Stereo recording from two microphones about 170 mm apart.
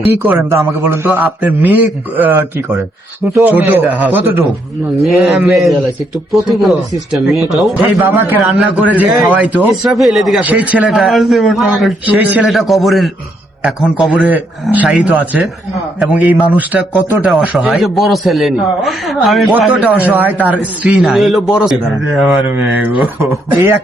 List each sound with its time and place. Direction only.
0.2 s a man's voice: 10° right (ahead or behind)
4.9 s a man's voice: centre (ahead or behind)
7.9 s a man's voice: 10° right (ahead or behind)